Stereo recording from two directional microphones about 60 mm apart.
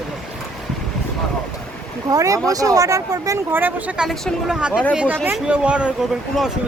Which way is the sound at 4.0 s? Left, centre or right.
Centre.